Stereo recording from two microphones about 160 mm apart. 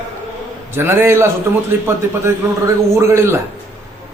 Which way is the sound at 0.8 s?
15° right (ahead or behind).